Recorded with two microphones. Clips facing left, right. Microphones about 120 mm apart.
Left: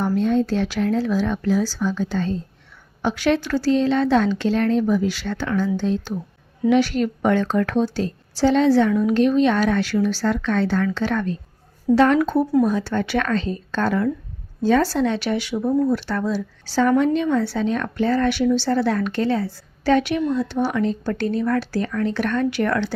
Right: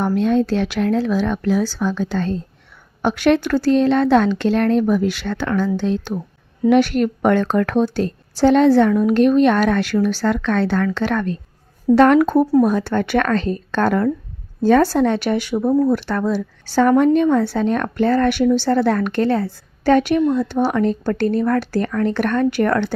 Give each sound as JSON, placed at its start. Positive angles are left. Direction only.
{"t": 0.0, "sound": "a woman's voice", "side_deg": -70}
{"t": 6.7, "sound": "a woman's voice", "side_deg": -55}